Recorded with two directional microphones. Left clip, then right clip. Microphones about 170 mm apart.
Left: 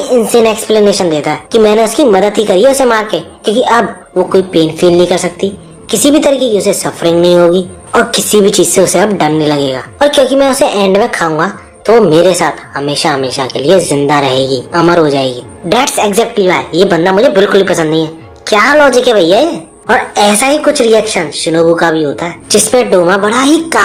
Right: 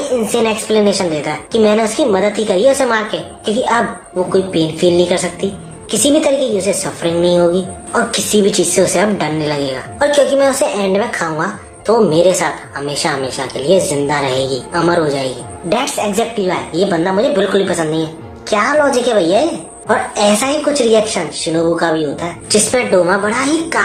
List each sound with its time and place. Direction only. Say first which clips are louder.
0.1 s a woman's voice: left 9 dB; 40° left (ahead or behind)